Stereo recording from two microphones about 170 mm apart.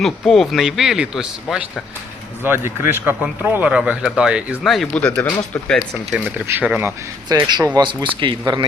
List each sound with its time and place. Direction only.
0.0 s a man's voice: centre (ahead or behind)
6.1 s speech: 10° right (ahead or behind)
7.3 s speech: 25° right (ahead or behind)